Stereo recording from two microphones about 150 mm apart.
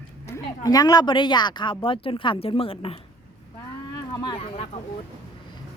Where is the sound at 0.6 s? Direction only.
25° left (ahead or behind).